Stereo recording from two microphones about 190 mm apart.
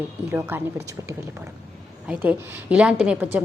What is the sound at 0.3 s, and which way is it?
Speech, 15° right (ahead or behind).